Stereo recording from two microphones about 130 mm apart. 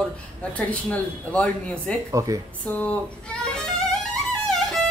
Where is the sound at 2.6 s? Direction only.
10° left (ahead or behind).